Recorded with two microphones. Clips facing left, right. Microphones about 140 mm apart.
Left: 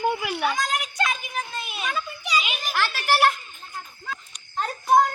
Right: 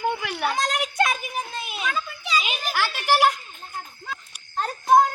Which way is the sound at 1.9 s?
15° left (ahead or behind).